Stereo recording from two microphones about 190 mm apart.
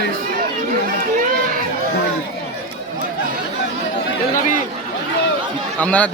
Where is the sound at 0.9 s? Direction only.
45° right (ahead or behind).